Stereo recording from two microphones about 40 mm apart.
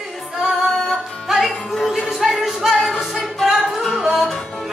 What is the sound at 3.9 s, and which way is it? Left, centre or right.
Music, centre.